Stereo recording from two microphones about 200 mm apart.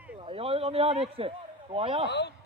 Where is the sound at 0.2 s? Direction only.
25° right (ahead or behind).